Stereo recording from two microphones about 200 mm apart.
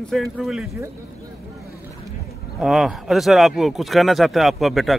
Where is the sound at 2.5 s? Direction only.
Centre (ahead or behind).